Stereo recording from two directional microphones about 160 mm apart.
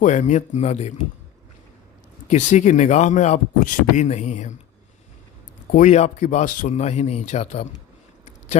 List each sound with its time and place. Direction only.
0.0 s speech: 50° left (ahead or behind)
2.3 s speech: 50° left (ahead or behind)
5.7 s speech: 50° left (ahead or behind)